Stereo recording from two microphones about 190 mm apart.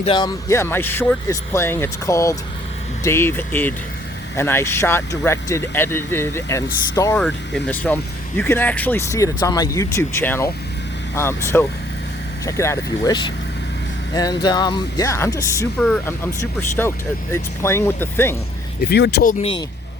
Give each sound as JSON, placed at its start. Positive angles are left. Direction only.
{"t": 0.0, "sound": "speech", "side_deg": 25}
{"t": 7.2, "sound": "speech", "side_deg": 5}
{"t": 18.8, "sound": "speech", "side_deg": 60}
{"t": 19.3, "sound": "speech", "side_deg": 30}